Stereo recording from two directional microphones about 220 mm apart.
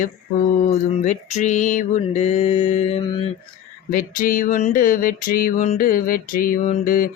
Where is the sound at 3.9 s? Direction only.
40° left (ahead or behind).